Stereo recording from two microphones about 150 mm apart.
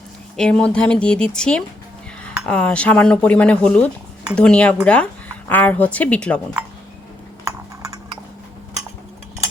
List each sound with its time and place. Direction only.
0.3 s speech: 5° left (ahead or behind)
7.4 s typing: 20° right (ahead or behind)